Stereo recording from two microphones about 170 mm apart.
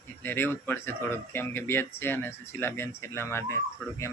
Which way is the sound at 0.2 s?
10° left (ahead or behind).